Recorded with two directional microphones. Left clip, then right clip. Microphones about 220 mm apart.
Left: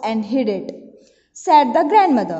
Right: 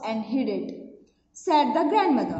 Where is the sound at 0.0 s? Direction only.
45° left (ahead or behind).